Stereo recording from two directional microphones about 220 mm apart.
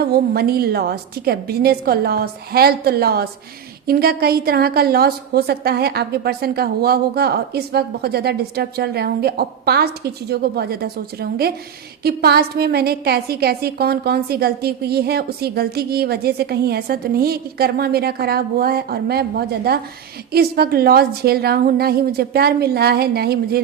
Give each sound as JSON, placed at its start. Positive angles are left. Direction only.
{"t": 0.0, "sound": "a woman's voice", "side_deg": -45}